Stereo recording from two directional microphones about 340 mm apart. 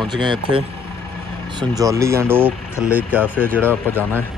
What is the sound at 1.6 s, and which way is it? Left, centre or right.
Speech, centre.